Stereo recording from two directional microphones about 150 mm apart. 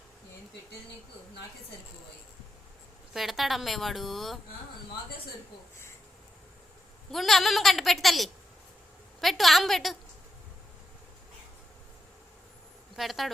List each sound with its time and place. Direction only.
3.1 s a woman's voice: centre (ahead or behind)
7.1 s a woman's voice: centre (ahead or behind)
13.0 s a woman's voice: centre (ahead or behind)